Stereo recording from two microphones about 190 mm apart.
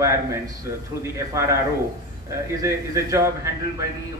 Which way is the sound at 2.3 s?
15° right (ahead or behind).